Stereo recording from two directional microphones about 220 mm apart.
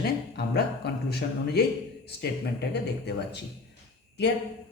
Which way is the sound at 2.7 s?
50° left (ahead or behind).